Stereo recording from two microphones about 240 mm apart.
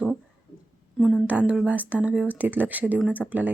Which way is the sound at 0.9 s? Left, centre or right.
Centre.